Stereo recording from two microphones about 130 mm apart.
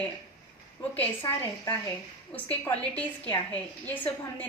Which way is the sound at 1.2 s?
25° left (ahead or behind).